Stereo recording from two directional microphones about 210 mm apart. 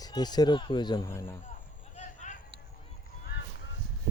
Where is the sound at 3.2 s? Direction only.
55° left (ahead or behind).